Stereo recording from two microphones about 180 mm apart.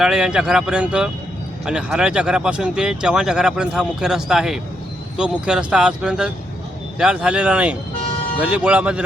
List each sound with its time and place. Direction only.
0.0 s speech: 5° right (ahead or behind)